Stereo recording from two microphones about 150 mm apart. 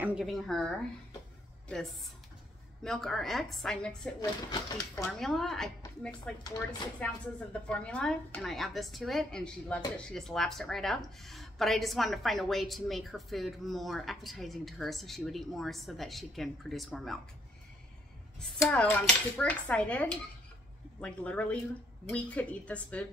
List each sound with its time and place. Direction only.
0.0 s speech: 5° right (ahead or behind)
4.2 s speech: 30° left (ahead or behind)
5.2 s speech: centre (ahead or behind)
18.4 s dishes: 5° left (ahead or behind)